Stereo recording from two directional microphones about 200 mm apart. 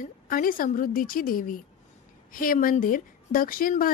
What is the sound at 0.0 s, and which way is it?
Speech, 45° left (ahead or behind).